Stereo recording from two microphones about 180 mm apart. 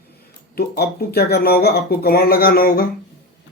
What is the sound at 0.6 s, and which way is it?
Speech, 60° left (ahead or behind).